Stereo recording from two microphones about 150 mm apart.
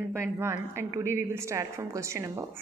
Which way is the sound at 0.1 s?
15° right (ahead or behind).